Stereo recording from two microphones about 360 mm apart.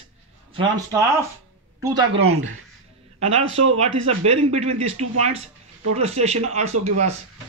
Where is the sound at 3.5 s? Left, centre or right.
Centre.